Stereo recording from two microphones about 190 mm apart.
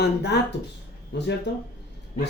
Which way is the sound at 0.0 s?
60° left (ahead or behind).